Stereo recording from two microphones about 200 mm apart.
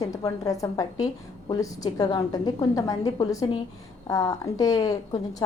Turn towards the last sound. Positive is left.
turn(degrees=20)  # may be behind; listen again after turning